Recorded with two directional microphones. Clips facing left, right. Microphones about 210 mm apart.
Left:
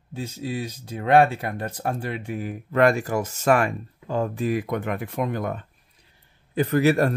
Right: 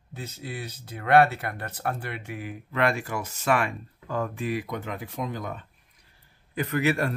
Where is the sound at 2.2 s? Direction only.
40° left (ahead or behind).